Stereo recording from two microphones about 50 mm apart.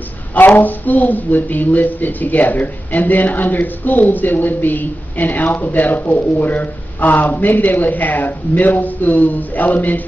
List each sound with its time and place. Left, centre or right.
0.6 s speech: left